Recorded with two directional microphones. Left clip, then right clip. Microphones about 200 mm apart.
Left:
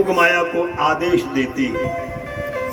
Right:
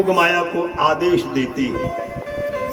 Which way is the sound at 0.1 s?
65° right (ahead or behind).